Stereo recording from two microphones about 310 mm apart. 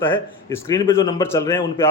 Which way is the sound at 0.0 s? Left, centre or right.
Centre.